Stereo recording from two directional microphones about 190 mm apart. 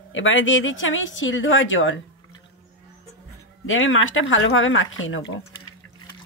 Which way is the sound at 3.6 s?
90° left.